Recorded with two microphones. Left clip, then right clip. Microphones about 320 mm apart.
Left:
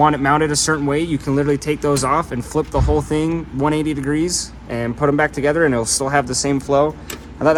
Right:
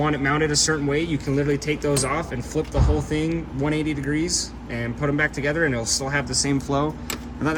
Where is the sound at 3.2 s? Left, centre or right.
Centre.